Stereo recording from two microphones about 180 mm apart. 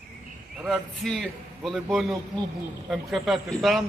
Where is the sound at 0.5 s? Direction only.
5° right (ahead or behind).